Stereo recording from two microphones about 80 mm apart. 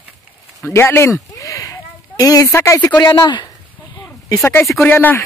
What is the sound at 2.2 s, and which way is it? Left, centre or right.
Speech, left.